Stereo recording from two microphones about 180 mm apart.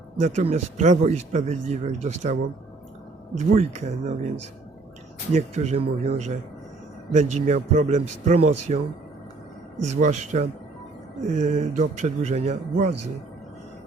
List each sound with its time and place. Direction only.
0.2 s speech: 40° right (ahead or behind)
3.5 s speech: 35° right (ahead or behind)
5.3 s speech: 40° right (ahead or behind)
9.9 s speech: 40° right (ahead or behind)